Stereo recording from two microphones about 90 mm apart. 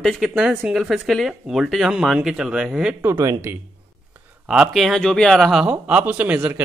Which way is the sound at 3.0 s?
30° right (ahead or behind).